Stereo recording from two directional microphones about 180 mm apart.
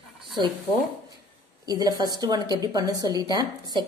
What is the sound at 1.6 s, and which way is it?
A woman's voice, 20° right (ahead or behind).